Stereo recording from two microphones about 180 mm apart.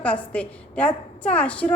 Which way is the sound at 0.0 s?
5° left (ahead or behind).